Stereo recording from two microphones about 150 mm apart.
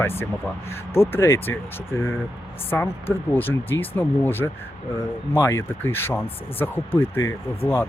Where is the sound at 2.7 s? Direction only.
15° left (ahead or behind).